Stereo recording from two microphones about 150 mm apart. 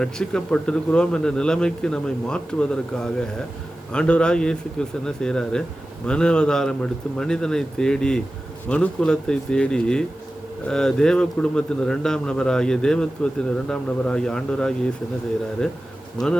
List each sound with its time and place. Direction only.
0.0 s a man's voice: 5° left (ahead or behind)
3.9 s a man's voice: 5° left (ahead or behind)
16.2 s speech: 25° left (ahead or behind)